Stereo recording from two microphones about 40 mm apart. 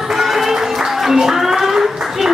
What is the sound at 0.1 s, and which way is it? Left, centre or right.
Music, centre.